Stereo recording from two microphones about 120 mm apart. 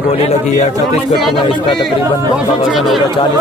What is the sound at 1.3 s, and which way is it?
Speech, 45° left (ahead or behind).